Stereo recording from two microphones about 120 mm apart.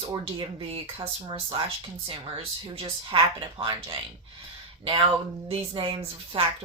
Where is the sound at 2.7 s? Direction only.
45° right (ahead or behind).